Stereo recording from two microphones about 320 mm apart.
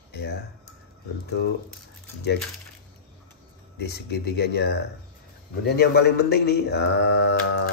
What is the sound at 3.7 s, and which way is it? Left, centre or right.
A man's voice, left.